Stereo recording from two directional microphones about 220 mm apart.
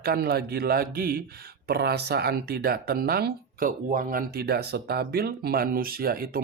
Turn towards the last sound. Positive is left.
turn(degrees=-40)  # may be behind; listen again after turning